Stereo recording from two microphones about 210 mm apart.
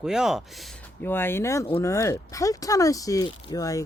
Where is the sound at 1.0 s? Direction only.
10° left (ahead or behind).